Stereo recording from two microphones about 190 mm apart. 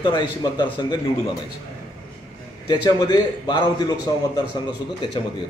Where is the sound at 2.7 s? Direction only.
20° left (ahead or behind).